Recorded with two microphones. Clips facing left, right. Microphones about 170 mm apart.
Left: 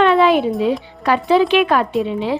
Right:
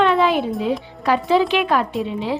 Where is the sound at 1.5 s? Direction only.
65° left (ahead or behind).